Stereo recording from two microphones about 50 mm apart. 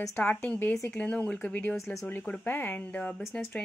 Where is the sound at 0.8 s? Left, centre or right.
Left.